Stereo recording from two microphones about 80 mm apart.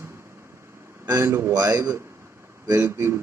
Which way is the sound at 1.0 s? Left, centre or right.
Right.